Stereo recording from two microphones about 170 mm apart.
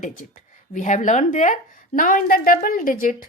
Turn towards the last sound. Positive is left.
turn(degrees=55)  # may be behind; listen again after turning